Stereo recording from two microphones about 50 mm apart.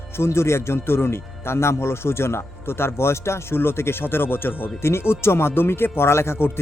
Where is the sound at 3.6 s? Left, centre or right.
Left.